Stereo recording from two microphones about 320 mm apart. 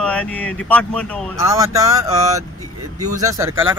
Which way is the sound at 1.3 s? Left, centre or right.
Centre.